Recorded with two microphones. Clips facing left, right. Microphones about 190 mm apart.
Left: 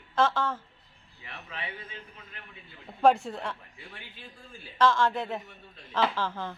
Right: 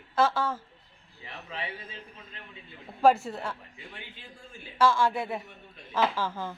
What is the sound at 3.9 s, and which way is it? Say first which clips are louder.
Speech: right 1 dB; 20° right (ahead or behind).